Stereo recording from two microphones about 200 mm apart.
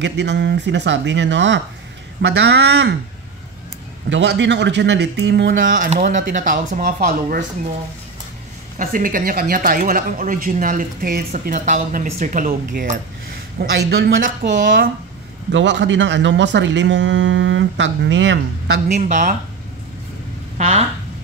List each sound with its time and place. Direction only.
0.0 s speech: 60° right (ahead or behind)
4.1 s speech: 60° right (ahead or behind)
5.7 s speech: 40° right (ahead or behind)
8.7 s speech: 45° right (ahead or behind)
15.5 s speech: 65° right (ahead or behind)
18.9 s speech: 35° right (ahead or behind)
20.5 s speech: 35° right (ahead or behind)